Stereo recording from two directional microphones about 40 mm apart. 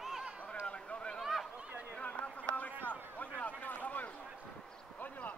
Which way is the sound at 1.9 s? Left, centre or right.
Left.